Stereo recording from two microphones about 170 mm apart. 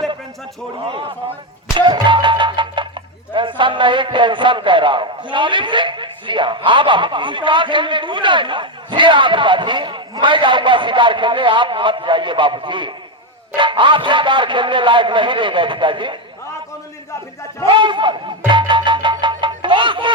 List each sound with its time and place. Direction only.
0.9 s a man's voice: 30° right (ahead or behind)
1.7 s music: 25° right (ahead or behind)
3.6 s a man's voice: 30° right (ahead or behind)
17.7 s music: 30° right (ahead or behind)